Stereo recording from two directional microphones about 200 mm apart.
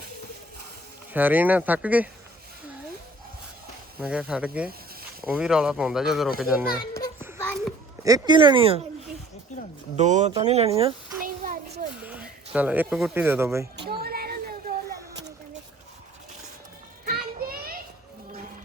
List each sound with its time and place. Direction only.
1.1 s speech: 10° right (ahead or behind)
4.0 s speech: 5° right (ahead or behind)
6.7 s children playing: 20° left (ahead or behind)
8.0 s speech: 20° right (ahead or behind)
10.0 s speech: 35° right (ahead or behind)
11.2 s a sound: 45° right (ahead or behind)
11.9 s a sound: 5° right (ahead or behind)
12.5 s speech: 10° right (ahead or behind)
13.8 s a sound: 50° right (ahead or behind)
17.1 s children playing: 50° right (ahead or behind)